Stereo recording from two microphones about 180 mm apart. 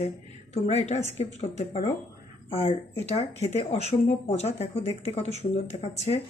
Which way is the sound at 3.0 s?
35° left (ahead or behind).